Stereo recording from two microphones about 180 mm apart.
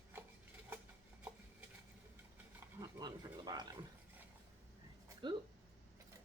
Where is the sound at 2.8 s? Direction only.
20° right (ahead or behind).